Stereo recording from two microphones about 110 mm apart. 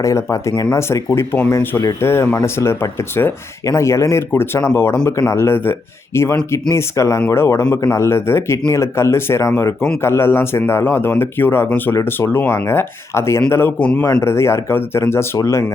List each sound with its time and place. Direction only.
0.0 s speech: 30° left (ahead or behind)